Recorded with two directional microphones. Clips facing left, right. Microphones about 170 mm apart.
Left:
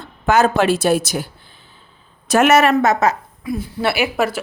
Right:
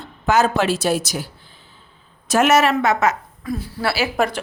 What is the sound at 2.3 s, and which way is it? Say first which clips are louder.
Speech: left 2 dB; 60° left (ahead or behind).